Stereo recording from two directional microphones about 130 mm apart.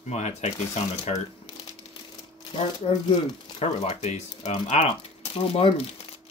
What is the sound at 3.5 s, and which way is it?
Speech, 55° left (ahead or behind).